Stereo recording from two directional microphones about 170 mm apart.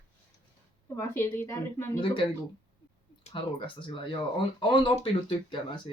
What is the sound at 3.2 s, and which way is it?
Speech, 30° left (ahead or behind).